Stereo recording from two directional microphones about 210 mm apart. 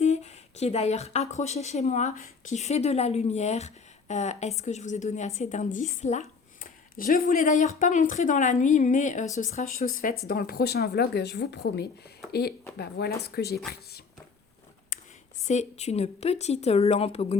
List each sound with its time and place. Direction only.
0.0 s a woman's voice: 30° left (ahead or behind); by 13.6 s 50° left (ahead or behind)
14.9 s a sound: 40° left (ahead or behind)
15.4 s a woman's voice: 30° left (ahead or behind)